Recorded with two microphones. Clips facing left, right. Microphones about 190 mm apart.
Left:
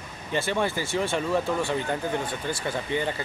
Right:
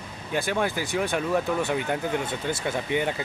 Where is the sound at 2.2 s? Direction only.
25° right (ahead or behind).